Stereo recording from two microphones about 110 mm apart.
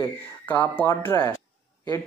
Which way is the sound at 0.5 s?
15° left (ahead or behind).